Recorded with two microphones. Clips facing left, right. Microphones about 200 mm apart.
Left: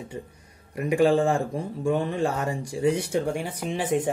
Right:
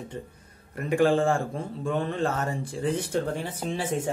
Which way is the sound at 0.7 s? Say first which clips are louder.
Left 2 dB; 15° left (ahead or behind).